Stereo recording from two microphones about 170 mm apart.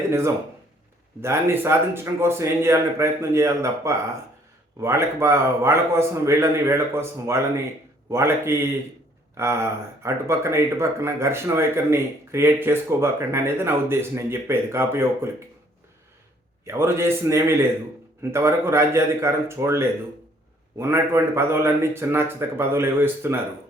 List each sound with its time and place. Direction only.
0.1 s speech: 15° right (ahead or behind)
16.6 s speech: 15° right (ahead or behind)